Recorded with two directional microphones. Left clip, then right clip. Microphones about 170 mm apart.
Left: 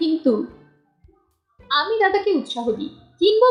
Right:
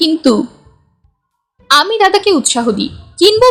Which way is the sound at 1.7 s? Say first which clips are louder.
Right 9 dB; 45° right (ahead or behind).